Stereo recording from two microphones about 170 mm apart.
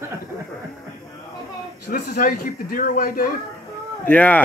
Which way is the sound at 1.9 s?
60° left (ahead or behind).